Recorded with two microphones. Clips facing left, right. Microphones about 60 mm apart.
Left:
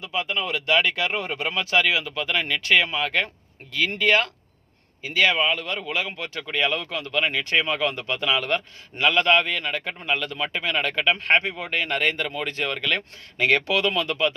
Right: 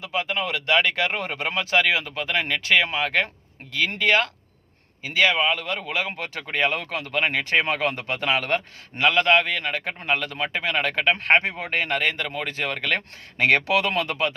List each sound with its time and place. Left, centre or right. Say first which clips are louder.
0.1 s speech: right 1 dB; right
5.5 s speech: even; right